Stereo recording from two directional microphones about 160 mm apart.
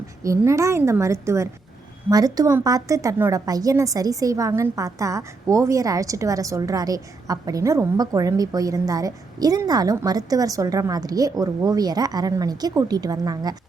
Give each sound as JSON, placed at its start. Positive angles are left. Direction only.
{"t": 0.2, "sound": "a woman's voice", "side_deg": -20}